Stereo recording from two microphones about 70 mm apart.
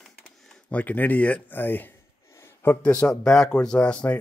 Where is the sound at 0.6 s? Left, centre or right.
Left.